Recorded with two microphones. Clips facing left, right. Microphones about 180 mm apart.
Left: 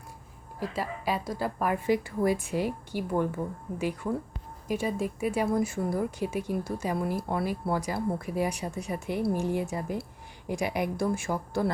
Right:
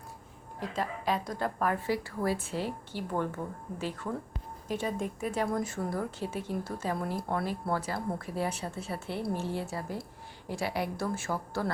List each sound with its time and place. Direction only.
0.6 s speech: 10° left (ahead or behind)